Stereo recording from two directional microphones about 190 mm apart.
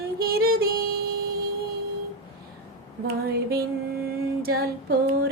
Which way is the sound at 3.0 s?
55° right (ahead or behind).